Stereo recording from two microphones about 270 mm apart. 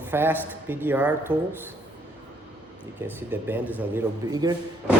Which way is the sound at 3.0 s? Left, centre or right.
Centre.